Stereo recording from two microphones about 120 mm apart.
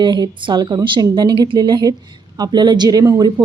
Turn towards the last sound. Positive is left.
turn(degrees=-30)  # may be behind; listen again after turning